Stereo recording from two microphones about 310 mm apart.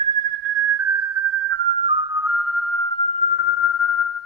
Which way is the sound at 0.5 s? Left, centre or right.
Right.